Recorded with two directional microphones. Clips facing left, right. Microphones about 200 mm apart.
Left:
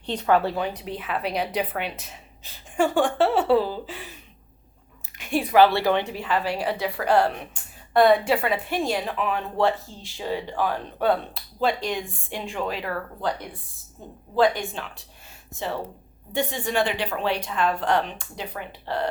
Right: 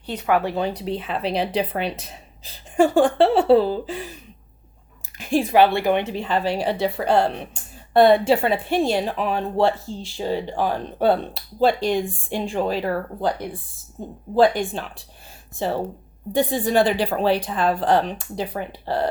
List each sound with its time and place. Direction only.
0.0 s speech: 10° right (ahead or behind)
0.5 s speech: 30° right (ahead or behind)
5.1 s a sound: 35° right (ahead or behind)
5.5 s speech: 15° right (ahead or behind)
14.6 s speech: 30° right (ahead or behind)